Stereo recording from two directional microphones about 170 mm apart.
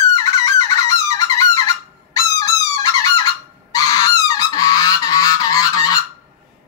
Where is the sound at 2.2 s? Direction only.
20° left (ahead or behind).